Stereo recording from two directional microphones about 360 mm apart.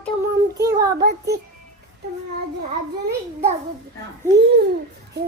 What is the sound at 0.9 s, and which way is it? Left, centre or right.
Speech, right.